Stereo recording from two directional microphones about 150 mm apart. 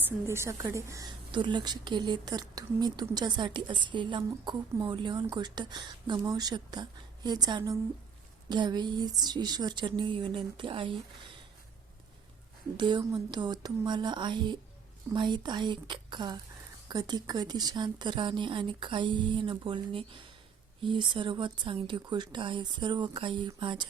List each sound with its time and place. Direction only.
0.0 s a woman's voice: 15° right (ahead or behind); by 10.9 s 35° right (ahead or behind)
12.7 s a woman's voice: 30° right (ahead or behind)